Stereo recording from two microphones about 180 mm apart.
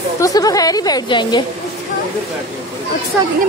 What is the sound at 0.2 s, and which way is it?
A woman's voice, 20° left (ahead or behind).